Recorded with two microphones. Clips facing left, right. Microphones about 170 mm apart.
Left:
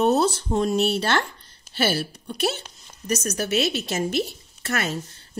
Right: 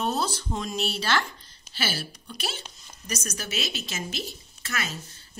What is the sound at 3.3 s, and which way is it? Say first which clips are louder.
A woman's voice: left 10 dB; 55° left (ahead or behind).